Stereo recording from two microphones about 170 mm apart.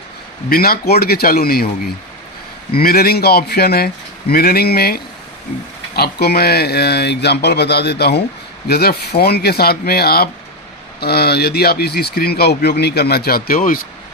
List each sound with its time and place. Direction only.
0.5 s a man's voice: 65° left (ahead or behind)
2.7 s a man's voice: 65° left (ahead or behind)